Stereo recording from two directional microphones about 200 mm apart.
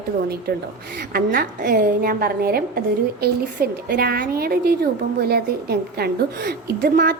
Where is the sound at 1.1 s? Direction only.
50° right (ahead or behind).